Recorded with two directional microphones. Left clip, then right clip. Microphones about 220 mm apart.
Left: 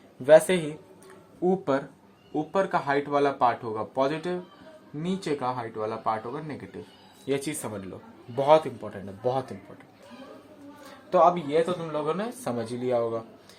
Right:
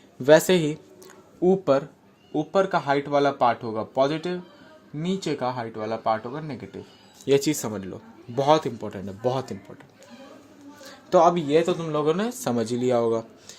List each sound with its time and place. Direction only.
0.3 s speech: 50° right (ahead or behind)
8.8 s speech: 55° right (ahead or behind)
11.1 s speech: 50° right (ahead or behind)